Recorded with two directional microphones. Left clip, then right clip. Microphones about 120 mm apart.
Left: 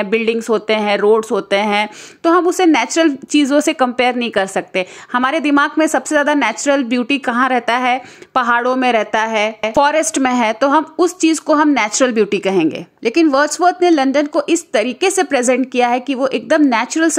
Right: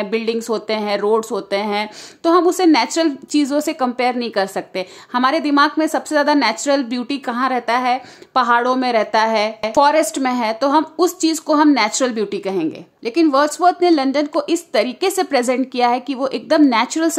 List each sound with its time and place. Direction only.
0.0 s a woman's voice: 20° left (ahead or behind)
8.3 s a woman's voice: 25° left (ahead or behind)